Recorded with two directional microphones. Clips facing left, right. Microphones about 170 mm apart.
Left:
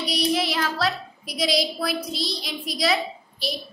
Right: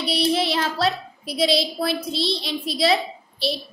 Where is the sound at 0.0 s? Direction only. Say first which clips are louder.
Right 2 dB; 30° right (ahead or behind).